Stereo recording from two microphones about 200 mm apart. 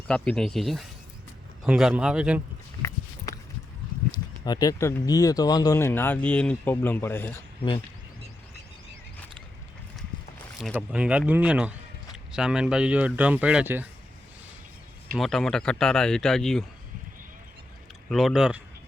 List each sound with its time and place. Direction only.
0.1 s speech: 5° left (ahead or behind)
4.4 s speech: 20° left (ahead or behind)
10.6 s speech: 5° right (ahead or behind)
15.2 s speech: centre (ahead or behind)
18.1 s speech: centre (ahead or behind)